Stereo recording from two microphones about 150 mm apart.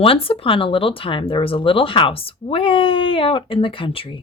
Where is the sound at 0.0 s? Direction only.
40° left (ahead or behind).